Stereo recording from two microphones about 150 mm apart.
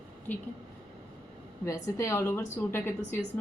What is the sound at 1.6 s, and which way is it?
A woman's voice, 20° left (ahead or behind).